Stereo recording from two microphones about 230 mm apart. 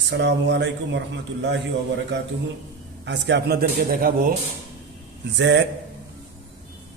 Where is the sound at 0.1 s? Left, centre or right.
Right.